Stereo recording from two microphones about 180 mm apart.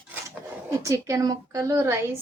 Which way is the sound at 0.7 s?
15° right (ahead or behind).